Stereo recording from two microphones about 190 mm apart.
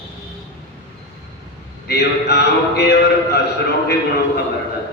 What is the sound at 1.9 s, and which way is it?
Speech, 60° left (ahead or behind).